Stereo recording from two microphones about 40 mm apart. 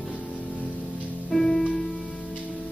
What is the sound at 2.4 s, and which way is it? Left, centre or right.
Music, left.